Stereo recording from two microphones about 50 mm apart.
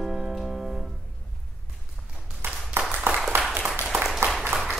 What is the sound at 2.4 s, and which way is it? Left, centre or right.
Clapping, right.